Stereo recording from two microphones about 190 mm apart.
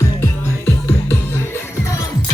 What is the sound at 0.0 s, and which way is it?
Music, 10° left (ahead or behind).